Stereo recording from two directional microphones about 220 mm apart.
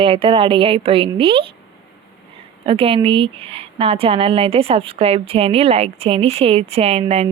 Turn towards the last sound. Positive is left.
turn(degrees=-30)  # may be behind; listen again after turning